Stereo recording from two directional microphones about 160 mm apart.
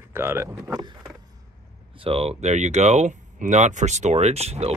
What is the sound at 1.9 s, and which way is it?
Speech, 35° right (ahead or behind).